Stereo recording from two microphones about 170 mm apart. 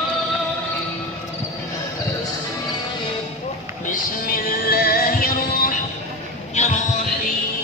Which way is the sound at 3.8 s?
55° left (ahead or behind).